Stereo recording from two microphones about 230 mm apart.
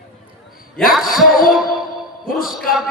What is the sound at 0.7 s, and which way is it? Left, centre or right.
Music, centre.